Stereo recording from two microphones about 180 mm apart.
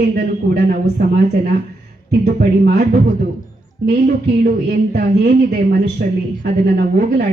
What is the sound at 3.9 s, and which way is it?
A woman's voice, 55° right (ahead or behind).